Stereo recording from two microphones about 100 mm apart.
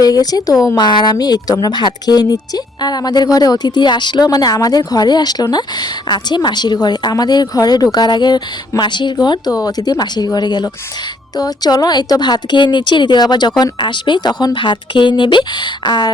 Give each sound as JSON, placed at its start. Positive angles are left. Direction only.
{"t": 0.0, "sound": "a woman's voice", "side_deg": 40}